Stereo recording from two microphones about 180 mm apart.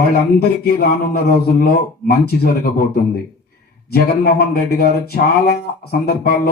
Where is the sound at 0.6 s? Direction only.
60° left (ahead or behind).